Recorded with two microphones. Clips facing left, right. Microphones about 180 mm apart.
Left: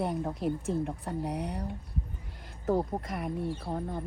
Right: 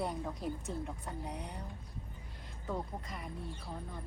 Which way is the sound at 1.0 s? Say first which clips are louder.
Left 9 dB; 70° left (ahead or behind).